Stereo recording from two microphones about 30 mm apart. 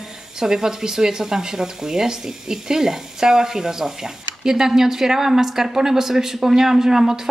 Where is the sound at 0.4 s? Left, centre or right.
Centre.